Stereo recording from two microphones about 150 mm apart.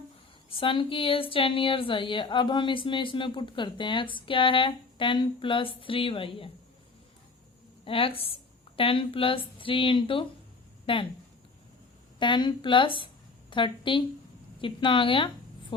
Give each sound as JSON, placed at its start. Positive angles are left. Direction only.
{"t": 0.5, "sound": "speech", "side_deg": 35}
{"t": 7.9, "sound": "speech", "side_deg": 35}
{"t": 12.2, "sound": "speech", "side_deg": 30}